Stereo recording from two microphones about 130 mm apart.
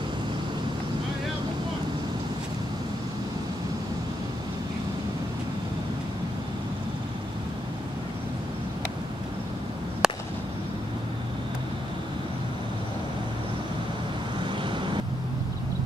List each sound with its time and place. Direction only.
10.0 s fireworks: 5° right (ahead or behind)